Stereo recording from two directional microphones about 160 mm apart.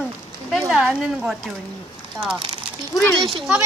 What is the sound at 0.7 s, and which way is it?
Speech, 5° right (ahead or behind).